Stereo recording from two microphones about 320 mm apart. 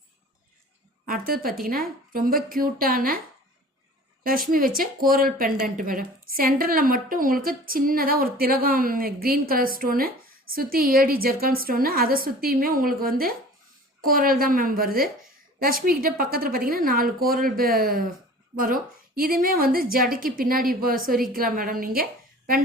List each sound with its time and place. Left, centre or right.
1.0 s a woman's voice: right
4.2 s a woman's voice: right